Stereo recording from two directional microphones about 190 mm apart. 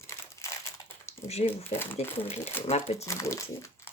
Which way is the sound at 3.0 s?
15° left (ahead or behind).